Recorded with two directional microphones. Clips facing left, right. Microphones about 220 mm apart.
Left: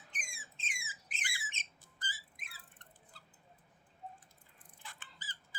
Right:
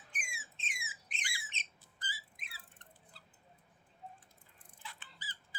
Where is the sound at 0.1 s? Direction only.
5° right (ahead or behind).